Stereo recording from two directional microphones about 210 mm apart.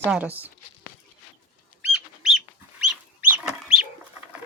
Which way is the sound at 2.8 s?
5° right (ahead or behind).